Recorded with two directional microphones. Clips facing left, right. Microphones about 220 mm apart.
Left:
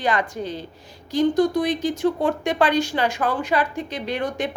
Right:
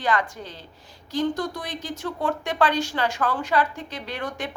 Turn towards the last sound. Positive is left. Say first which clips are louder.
# left 6 dB
turn(degrees=20)  # may be behind; listen again after turning